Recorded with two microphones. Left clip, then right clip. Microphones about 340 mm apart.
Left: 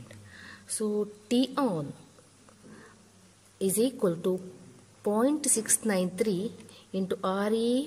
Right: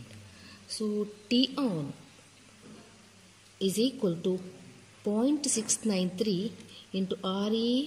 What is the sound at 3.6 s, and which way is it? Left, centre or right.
Speech, left.